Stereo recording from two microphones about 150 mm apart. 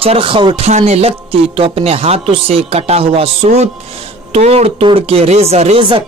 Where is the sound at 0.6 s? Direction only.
45° right (ahead or behind).